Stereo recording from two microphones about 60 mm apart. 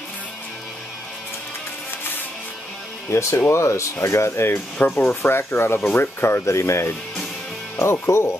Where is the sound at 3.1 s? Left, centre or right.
Left.